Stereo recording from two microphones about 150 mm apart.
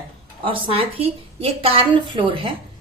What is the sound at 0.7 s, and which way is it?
A woman's voice, 40° right (ahead or behind).